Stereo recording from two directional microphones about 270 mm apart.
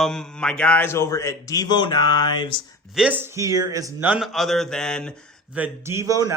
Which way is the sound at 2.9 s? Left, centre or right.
Centre.